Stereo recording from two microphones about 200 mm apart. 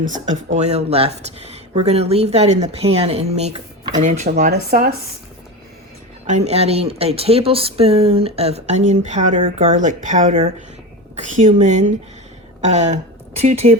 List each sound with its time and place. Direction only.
0.0 s speech: 40° right (ahead or behind)
4.5 s speech: 50° right (ahead or behind)
6.2 s speech: 35° right (ahead or behind)
11.6 s speech: 35° right (ahead or behind)